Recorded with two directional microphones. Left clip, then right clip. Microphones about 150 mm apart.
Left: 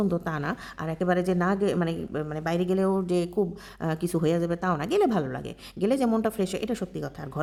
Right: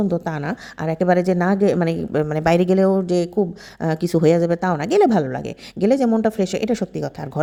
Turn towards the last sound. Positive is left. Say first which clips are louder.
# right 8 dB
turn(degrees=-35)  # may be behind; listen again after turning